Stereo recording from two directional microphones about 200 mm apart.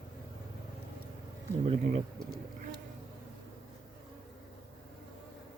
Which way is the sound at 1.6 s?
35° right (ahead or behind).